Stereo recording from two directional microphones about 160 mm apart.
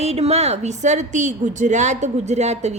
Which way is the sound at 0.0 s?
40° right (ahead or behind).